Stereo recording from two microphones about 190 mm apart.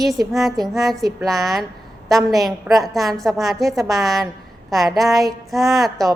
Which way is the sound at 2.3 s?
Centre (ahead or behind).